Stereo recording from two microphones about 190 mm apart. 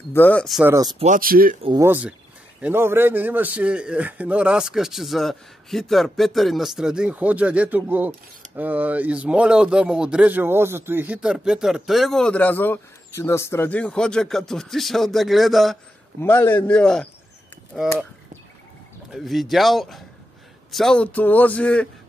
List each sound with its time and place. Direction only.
0.1 s a man's voice: 10° left (ahead or behind)
0.7 s speech: 15° right (ahead or behind)
0.9 s speech: 40° right (ahead or behind)
1.8 s speech: 10° right (ahead or behind)
16.2 s a man's voice: 10° left (ahead or behind)
19.1 s a man's voice: centre (ahead or behind)